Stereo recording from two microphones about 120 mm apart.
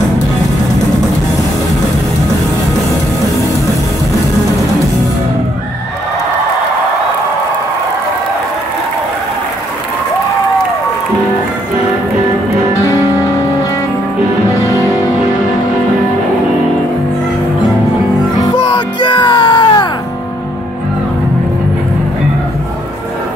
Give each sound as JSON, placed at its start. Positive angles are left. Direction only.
{"t": 18.3, "sound": "music", "side_deg": 35}